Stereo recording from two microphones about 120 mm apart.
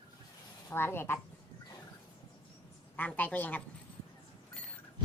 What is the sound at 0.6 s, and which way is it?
Speech, 20° left (ahead or behind).